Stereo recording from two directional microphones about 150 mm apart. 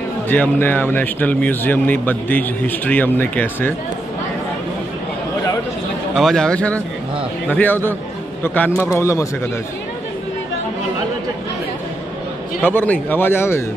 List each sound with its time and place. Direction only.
0.3 s speech: 15° left (ahead or behind)
6.1 s a man's voice: 5° left (ahead or behind); by 9.3 s 20° left (ahead or behind)
12.6 s speech: 10° left (ahead or behind)